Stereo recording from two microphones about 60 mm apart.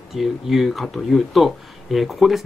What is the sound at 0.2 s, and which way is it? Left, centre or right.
Speech, centre.